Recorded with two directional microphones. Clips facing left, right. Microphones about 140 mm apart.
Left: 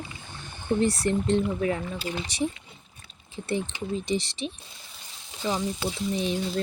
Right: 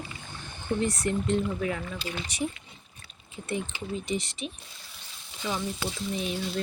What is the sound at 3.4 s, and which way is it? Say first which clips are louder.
Speech: left 3 dB; 30° left (ahead or behind).